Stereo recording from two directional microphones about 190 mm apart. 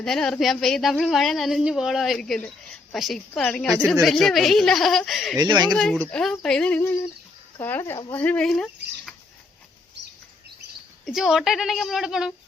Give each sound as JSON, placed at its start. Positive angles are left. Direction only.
{"t": 0.0, "sound": "speech", "side_deg": 0}
{"t": 5.4, "sound": "speech", "side_deg": -20}
{"t": 5.7, "sound": "speech", "side_deg": 5}
{"t": 11.0, "sound": "speech", "side_deg": 0}